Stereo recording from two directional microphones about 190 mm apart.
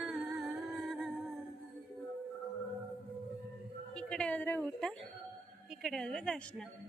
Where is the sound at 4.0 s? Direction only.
5° left (ahead or behind).